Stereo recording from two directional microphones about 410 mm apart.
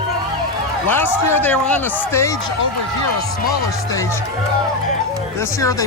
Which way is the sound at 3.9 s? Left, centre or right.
Centre.